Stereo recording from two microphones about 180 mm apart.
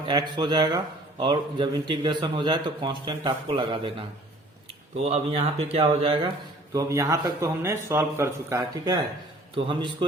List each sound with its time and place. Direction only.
0.1 s a man's voice: 25° right (ahead or behind)
6.7 s a man's voice: 15° right (ahead or behind)